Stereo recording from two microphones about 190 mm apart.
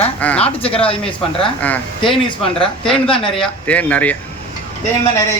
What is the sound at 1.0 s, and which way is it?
Speech, 5° left (ahead or behind).